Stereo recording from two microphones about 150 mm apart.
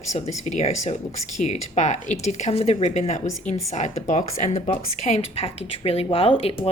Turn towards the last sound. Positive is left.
turn(degrees=40)  # may be behind; listen again after turning